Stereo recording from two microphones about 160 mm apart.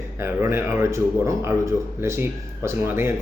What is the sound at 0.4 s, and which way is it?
Speech, 15° right (ahead or behind).